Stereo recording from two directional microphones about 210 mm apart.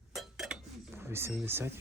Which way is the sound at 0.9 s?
10° right (ahead or behind).